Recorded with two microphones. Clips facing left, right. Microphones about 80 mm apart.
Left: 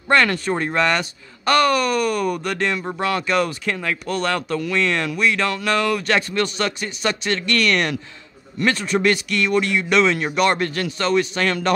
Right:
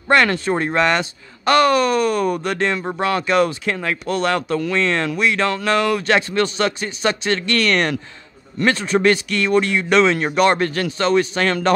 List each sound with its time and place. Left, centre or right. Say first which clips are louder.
0.1 s speech: right 2 dB; right
11.3 s speech: right 2 dB; right